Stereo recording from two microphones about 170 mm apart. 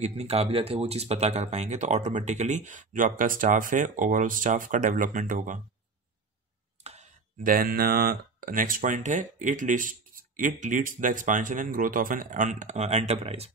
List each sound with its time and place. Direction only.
0.0 s speech: 35° right (ahead or behind)
6.8 s clicking: 40° right (ahead or behind)
7.4 s speech: 60° right (ahead or behind); by 13.5 s 35° right (ahead or behind)